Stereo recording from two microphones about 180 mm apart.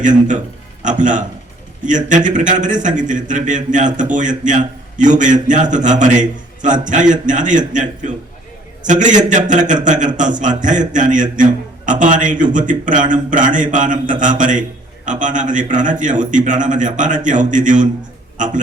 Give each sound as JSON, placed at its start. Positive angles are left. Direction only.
{"t": 0.0, "sound": "a man's voice", "side_deg": -45}